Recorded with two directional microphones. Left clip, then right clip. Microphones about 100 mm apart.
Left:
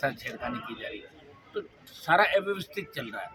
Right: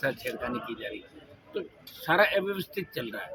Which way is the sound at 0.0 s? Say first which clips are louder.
Right 1 dB; 20° left (ahead or behind).